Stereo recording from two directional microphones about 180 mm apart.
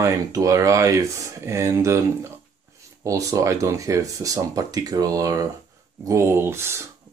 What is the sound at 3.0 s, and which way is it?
Speech, 20° right (ahead or behind).